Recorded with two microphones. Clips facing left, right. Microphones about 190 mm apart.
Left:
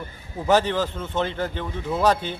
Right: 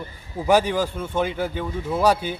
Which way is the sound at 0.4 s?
10° right (ahead or behind).